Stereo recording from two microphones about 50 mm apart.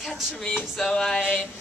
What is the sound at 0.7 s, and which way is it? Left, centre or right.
Speech, centre.